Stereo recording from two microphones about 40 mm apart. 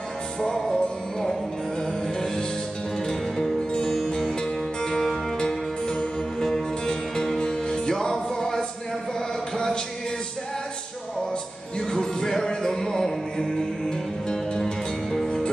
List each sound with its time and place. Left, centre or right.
0.4 s music: centre
2.1 s music: centre
6.4 s music: centre
11.8 s music: centre